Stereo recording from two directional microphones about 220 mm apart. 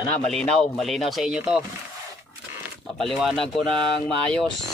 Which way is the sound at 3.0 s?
Centre (ahead or behind).